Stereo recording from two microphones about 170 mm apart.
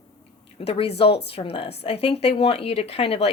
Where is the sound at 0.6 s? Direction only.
35° left (ahead or behind).